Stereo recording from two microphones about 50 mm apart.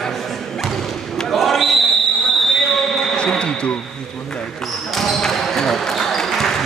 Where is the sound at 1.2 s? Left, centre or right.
Centre.